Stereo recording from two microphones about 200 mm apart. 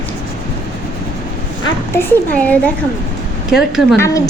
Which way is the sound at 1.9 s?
10° left (ahead or behind).